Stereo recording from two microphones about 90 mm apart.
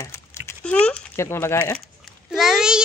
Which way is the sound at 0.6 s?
10° left (ahead or behind).